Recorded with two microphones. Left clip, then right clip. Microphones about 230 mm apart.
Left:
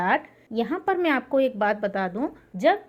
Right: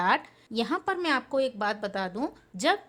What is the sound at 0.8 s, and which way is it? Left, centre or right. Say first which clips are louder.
A woman's voice: left 4 dB; centre.